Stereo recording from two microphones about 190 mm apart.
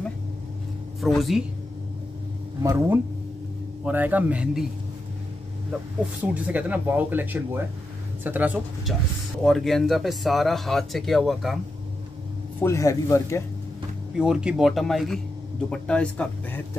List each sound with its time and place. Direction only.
1.0 s speech: centre (ahead or behind)
2.6 s speech: 15° right (ahead or behind)
6.2 s speech: 10° right (ahead or behind)
12.6 s a man's voice: 15° left (ahead or behind)
14.1 s speech: 5° right (ahead or behind)